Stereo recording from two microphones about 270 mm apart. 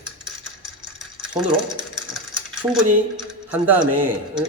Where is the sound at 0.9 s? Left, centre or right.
Centre.